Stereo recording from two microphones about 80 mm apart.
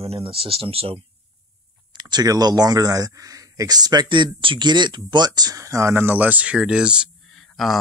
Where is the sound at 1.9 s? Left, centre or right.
Right; by 7.1 s centre.